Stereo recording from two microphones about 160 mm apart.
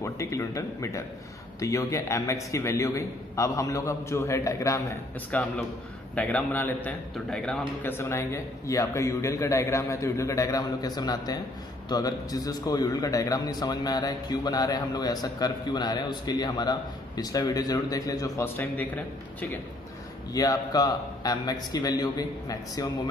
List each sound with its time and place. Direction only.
0.0 s a man's voice: 20° left (ahead or behind)
7.8 s a man's voice: 15° left (ahead or behind)
20.3 s a man's voice: 25° left (ahead or behind)